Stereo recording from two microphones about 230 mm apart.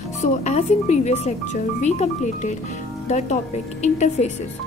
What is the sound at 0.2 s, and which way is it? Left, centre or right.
A woman's voice, left.